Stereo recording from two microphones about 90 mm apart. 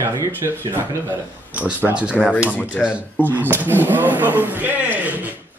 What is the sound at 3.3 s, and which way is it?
Speech, 20° right (ahead or behind).